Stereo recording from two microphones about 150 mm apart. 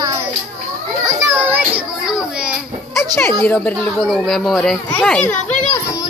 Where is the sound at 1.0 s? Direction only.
15° right (ahead or behind).